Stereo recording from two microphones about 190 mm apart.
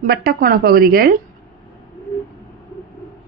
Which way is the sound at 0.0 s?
50° right (ahead or behind).